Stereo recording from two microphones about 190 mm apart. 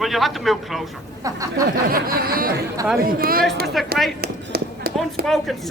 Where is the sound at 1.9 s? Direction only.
50° right (ahead or behind).